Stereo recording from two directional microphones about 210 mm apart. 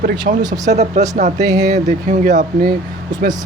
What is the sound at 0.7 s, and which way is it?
Speech, 30° right (ahead or behind).